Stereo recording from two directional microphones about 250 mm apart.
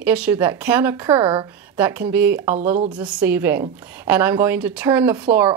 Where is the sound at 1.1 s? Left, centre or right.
Centre.